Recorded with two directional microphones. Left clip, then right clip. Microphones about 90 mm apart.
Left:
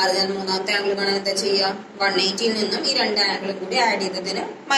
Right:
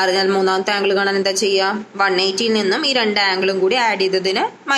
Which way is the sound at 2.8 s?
60° right (ahead or behind).